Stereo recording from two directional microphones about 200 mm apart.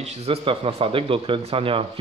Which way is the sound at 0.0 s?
35° right (ahead or behind).